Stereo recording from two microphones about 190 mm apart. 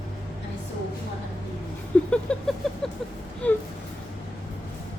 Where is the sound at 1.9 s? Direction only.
5° left (ahead or behind).